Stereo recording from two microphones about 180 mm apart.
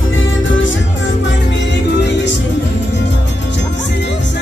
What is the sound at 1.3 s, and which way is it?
Music, 80° left.